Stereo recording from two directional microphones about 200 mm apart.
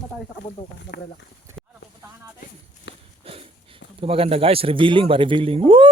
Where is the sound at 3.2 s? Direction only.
30° right (ahead or behind).